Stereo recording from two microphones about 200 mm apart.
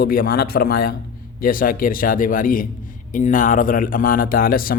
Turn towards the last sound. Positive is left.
turn(degrees=45)  # may be behind; listen again after turning